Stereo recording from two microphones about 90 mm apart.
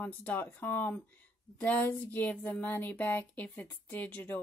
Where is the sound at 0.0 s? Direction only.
20° left (ahead or behind).